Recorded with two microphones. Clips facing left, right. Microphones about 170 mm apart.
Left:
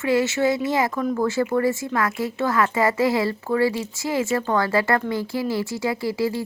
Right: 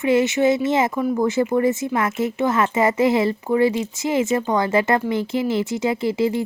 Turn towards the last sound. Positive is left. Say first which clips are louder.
# right 3 dB
turn(degrees=-20)  # may be behind; listen again after turning